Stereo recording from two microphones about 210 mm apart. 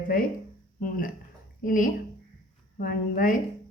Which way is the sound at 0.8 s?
40° left (ahead or behind).